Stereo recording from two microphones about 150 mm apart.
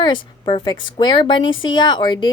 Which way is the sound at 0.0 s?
35° left (ahead or behind).